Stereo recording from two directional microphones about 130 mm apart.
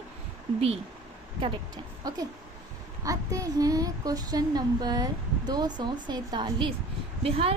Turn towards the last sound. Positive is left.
turn(degrees=-50)  # may be behind; listen again after turning